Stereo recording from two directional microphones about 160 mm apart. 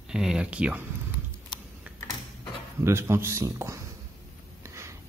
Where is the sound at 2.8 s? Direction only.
15° right (ahead or behind).